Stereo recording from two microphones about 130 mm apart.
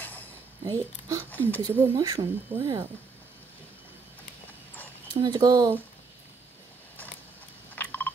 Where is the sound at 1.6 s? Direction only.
25° right (ahead or behind).